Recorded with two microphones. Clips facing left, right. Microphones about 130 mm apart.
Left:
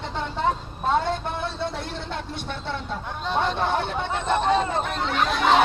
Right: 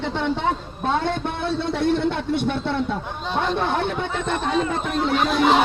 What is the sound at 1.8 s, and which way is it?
Speech, 60° right (ahead or behind).